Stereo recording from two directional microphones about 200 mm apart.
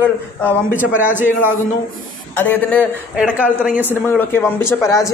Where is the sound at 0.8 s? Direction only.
10° right (ahead or behind).